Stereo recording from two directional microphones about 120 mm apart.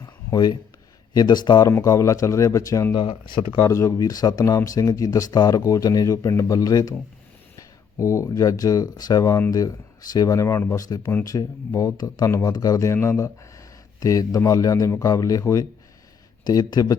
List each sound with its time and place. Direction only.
0.0 s a sound: 30° left (ahead or behind)
1.1 s speech: 35° left (ahead or behind)
1.6 s speech: 25° left (ahead or behind)
3.0 s speech: 45° left (ahead or behind)
3.6 s speech: 25° left (ahead or behind)